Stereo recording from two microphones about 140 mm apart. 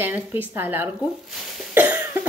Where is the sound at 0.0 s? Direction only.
15° right (ahead or behind).